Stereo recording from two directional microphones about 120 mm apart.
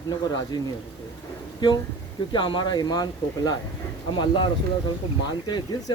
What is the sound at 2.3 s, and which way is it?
Speech, 40° left (ahead or behind).